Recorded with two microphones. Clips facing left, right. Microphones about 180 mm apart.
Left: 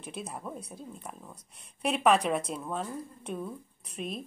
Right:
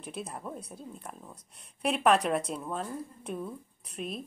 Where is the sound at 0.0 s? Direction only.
Centre (ahead or behind).